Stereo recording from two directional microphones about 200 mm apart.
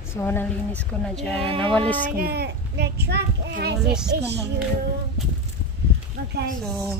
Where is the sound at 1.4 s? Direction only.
25° right (ahead or behind).